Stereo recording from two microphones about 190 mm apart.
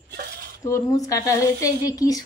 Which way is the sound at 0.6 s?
15° left (ahead or behind).